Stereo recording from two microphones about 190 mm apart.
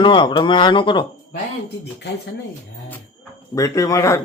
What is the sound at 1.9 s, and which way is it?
Speech, 65° left (ahead or behind).